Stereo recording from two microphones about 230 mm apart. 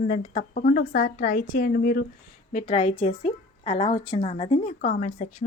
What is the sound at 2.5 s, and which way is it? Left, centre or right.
A woman's voice, left.